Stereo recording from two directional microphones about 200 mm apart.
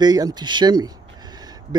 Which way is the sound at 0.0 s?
20° right (ahead or behind).